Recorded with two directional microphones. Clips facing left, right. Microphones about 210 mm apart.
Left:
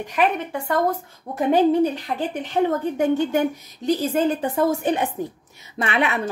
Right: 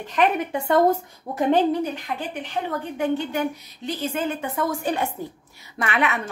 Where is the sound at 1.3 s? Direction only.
5° right (ahead or behind).